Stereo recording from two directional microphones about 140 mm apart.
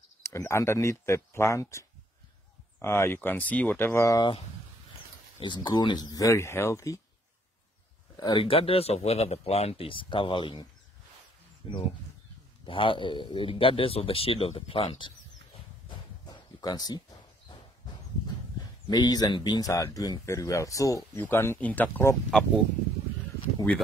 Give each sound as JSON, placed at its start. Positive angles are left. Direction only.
{"t": 0.2, "sound": "speech", "side_deg": 20}
{"t": 4.2, "sound": "speech", "side_deg": 40}
{"t": 8.2, "sound": "speech", "side_deg": 35}
{"t": 16.3, "sound": "horse", "side_deg": 30}
{"t": 18.9, "sound": "speech", "side_deg": 30}